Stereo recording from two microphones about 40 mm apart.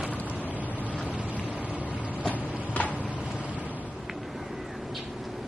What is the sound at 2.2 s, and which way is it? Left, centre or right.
Printer, left.